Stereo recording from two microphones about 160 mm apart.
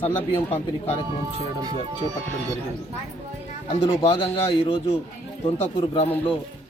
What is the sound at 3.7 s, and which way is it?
A man's voice, 35° left (ahead or behind).